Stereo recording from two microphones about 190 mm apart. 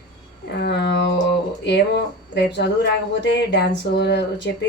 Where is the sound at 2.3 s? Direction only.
65° left (ahead or behind).